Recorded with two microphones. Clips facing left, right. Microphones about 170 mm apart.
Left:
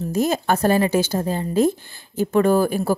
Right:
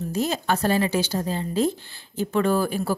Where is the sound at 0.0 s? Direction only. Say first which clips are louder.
Left 5 dB; 45° left (ahead or behind).